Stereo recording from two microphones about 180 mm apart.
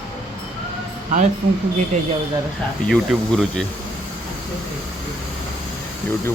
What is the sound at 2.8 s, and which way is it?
Speech, centre (ahead or behind).